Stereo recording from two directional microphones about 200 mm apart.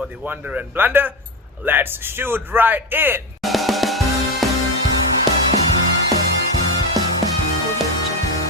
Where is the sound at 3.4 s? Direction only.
Centre (ahead or behind).